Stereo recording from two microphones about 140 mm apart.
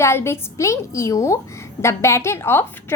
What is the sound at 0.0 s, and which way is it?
A woman's voice, 20° left (ahead or behind).